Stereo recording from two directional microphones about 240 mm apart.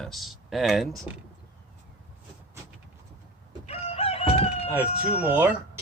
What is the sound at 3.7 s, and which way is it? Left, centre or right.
Chicken, left.